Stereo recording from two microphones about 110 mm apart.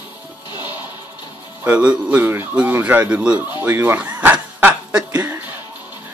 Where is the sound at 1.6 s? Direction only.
10° right (ahead or behind).